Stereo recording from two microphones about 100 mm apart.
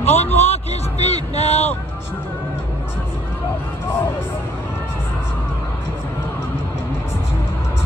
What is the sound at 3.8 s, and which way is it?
Music, 20° left (ahead or behind).